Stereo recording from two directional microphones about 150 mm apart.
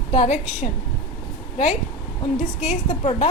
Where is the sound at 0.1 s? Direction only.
50° left (ahead or behind).